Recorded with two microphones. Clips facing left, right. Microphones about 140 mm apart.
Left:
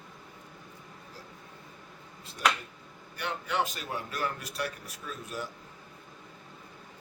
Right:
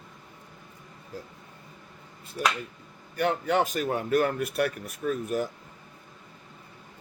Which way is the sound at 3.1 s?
45° right (ahead or behind).